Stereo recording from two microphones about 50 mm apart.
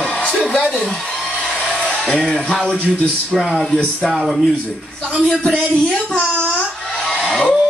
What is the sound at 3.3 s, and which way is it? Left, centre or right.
Speech, centre.